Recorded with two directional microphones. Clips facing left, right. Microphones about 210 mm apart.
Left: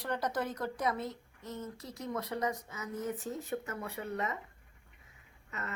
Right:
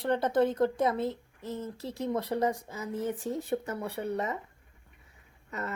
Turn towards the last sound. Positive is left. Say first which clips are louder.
# right 6 dB
turn(degrees=-35)  # may be behind; listen again after turning